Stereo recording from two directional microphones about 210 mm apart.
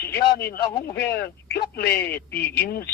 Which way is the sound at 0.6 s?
20° left (ahead or behind).